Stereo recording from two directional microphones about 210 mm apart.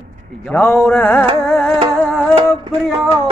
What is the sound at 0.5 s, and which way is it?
Speech, 5° left (ahead or behind).